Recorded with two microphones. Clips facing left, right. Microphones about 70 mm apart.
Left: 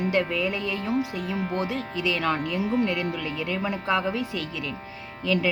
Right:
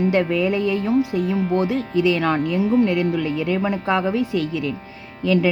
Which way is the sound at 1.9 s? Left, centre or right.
Right.